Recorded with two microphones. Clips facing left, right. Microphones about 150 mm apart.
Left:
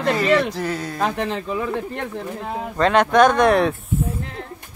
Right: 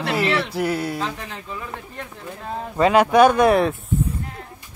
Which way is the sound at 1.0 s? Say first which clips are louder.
Left 7 dB; 65° left (ahead or behind).